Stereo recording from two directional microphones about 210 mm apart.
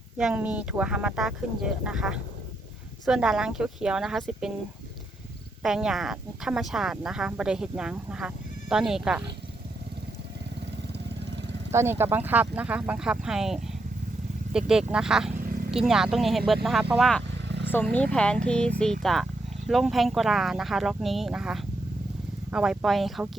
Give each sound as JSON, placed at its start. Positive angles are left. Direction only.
{"t": 0.2, "sound": "speech", "side_deg": -5}
{"t": 5.6, "sound": "speech", "side_deg": 0}
{"t": 11.7, "sound": "speech", "side_deg": -10}
{"t": 15.4, "sound": "a sound", "side_deg": -40}
{"t": 15.7, "sound": "speech", "side_deg": 0}